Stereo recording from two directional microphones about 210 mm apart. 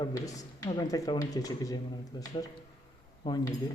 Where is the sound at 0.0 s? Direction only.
15° left (ahead or behind).